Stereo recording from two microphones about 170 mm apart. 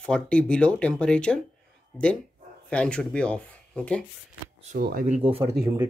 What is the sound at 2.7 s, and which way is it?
Speech, 5° left (ahead or behind).